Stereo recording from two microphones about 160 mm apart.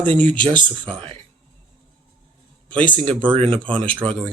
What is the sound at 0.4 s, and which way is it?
Speech, 30° right (ahead or behind).